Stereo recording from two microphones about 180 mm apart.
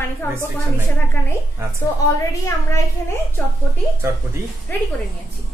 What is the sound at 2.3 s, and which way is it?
Speech, 20° left (ahead or behind).